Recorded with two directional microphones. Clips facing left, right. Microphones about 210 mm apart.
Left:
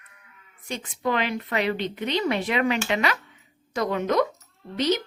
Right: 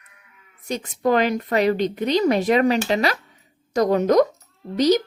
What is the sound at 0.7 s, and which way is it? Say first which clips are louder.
A woman's voice: right 7 dB; 40° right (ahead or behind).